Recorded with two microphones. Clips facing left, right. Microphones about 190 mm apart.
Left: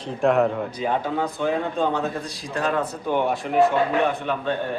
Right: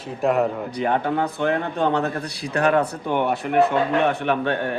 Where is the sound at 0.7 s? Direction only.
60° right (ahead or behind).